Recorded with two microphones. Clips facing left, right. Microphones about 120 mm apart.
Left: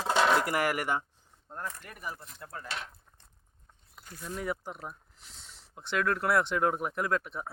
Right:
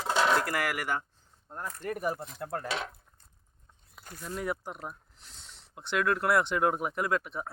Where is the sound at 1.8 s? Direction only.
50° right (ahead or behind); by 2.9 s 80° right.